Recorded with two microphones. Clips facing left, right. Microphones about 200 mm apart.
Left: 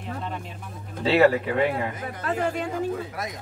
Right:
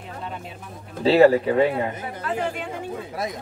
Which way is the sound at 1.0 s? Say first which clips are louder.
Right 4 dB; 35° right (ahead or behind).